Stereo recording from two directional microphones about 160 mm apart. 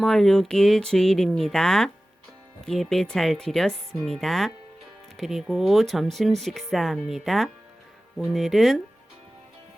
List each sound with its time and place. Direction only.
0.0 s speech: centre (ahead or behind)